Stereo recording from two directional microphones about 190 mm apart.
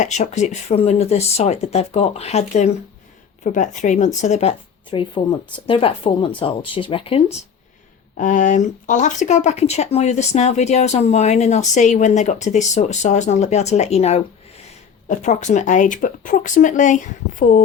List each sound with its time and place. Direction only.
0.0 s speech: 40° left (ahead or behind)
8.1 s speech: 45° left (ahead or behind)